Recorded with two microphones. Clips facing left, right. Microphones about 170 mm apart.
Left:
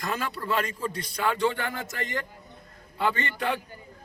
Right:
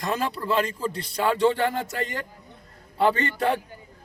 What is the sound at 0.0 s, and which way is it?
Speech, 30° right (ahead or behind).